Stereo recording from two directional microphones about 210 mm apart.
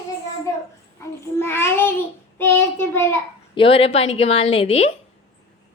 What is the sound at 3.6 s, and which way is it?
A woman's voice, 25° left (ahead or behind).